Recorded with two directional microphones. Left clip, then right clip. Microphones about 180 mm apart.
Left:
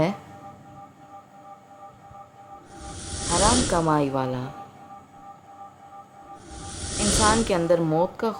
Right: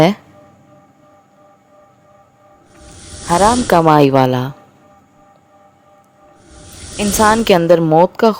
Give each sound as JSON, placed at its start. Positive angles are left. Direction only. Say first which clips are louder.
{"t": 2.7, "sound": "snake", "louder": "even", "side_deg": 0}
{"t": 3.8, "sound": "speech", "louder": "right 13 dB", "side_deg": -55}
{"t": 6.3, "sound": "snake", "louder": "left 1 dB", "side_deg": 0}
{"t": 7.6, "sound": "speech", "louder": "right 11 dB", "side_deg": -40}